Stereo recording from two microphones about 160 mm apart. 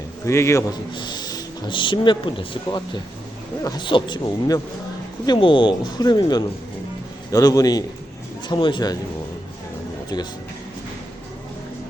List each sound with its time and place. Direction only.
0.3 s a man's voice: 15° left (ahead or behind)